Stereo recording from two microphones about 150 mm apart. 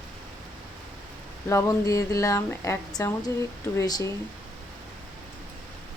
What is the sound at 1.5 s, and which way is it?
Speech, 20° left (ahead or behind).